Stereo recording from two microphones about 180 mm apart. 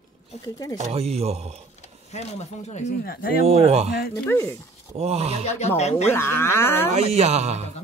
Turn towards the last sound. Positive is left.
turn(degrees=-35)  # may be behind; listen again after turning